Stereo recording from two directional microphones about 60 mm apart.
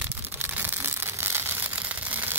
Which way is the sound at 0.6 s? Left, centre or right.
Right.